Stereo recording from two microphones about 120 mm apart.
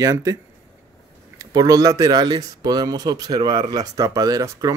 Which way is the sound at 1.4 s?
30° right (ahead or behind).